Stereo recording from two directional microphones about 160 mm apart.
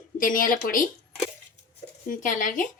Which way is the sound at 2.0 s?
55° left (ahead or behind).